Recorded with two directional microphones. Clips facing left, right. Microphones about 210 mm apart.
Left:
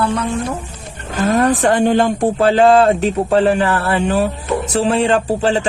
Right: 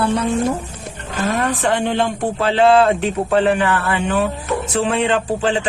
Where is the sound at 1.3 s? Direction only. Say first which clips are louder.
Left 5 dB; 40° left (ahead or behind).